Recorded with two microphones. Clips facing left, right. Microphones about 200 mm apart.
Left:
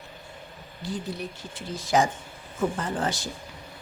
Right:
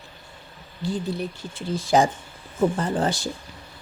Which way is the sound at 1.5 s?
30° right (ahead or behind).